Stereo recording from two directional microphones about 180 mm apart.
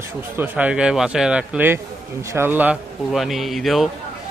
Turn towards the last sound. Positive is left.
turn(degrees=0)  # may be behind; listen again after turning